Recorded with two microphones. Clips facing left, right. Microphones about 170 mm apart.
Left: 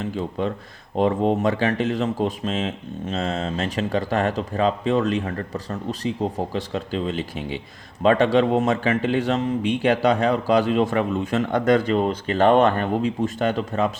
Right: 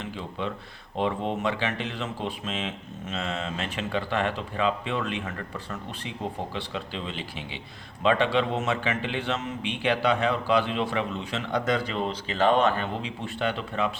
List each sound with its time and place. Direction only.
0.0 s speech: 40° left (ahead or behind)